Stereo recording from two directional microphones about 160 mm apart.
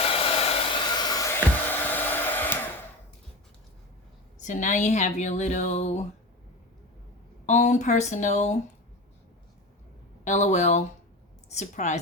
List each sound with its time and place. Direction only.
0.0 s hair dryer: 35° left (ahead or behind); by 2.6 s 10° left (ahead or behind)
4.4 s speech: 50° left (ahead or behind)
7.4 s speech: 50° left (ahead or behind)
10.2 s a woman's voice: 45° left (ahead or behind)